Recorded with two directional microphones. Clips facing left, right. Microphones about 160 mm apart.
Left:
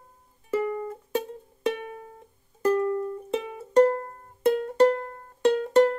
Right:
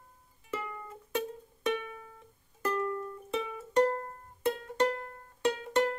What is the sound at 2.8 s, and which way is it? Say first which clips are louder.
Music: left 8 dB; 30° left (ahead or behind).